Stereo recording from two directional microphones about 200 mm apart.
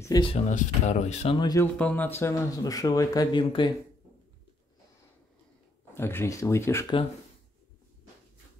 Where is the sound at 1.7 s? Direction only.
10° left (ahead or behind); by 3.7 s 25° left (ahead or behind).